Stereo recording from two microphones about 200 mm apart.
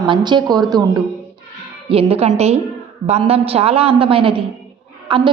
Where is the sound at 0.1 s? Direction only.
25° right (ahead or behind).